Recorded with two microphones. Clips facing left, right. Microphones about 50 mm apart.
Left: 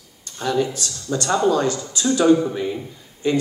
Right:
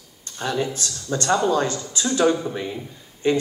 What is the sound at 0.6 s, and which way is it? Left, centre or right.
Speech, right.